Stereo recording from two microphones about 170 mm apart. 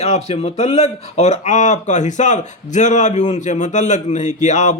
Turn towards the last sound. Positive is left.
turn(degrees=45)  # may be behind; listen again after turning